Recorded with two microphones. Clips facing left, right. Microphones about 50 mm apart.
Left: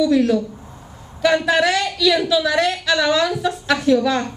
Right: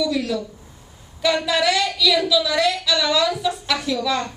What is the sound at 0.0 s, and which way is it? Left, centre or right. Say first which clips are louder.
Speech: left 6 dB; left.